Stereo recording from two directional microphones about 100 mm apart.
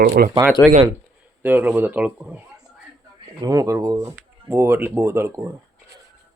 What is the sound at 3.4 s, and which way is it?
Speech, 35° right (ahead or behind).